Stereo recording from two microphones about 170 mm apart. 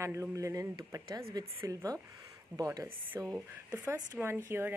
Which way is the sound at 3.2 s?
5° left (ahead or behind).